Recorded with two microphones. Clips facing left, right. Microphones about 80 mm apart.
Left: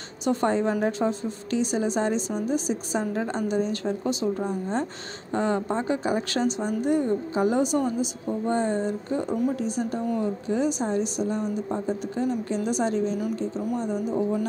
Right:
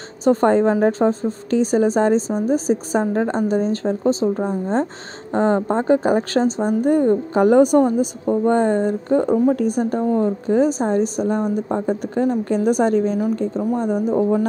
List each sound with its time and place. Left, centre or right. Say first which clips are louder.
0.2 s a woman's voice: right 8 dB; right
10.0 s a woman's voice: right 8 dB; right